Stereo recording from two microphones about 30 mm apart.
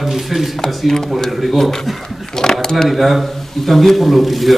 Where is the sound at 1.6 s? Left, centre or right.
Centre.